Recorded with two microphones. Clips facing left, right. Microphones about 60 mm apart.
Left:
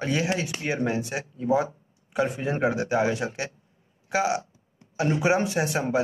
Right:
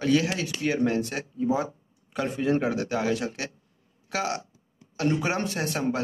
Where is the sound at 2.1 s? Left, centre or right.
Centre.